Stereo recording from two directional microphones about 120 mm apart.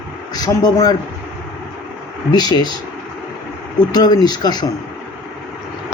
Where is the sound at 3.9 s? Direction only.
35° left (ahead or behind).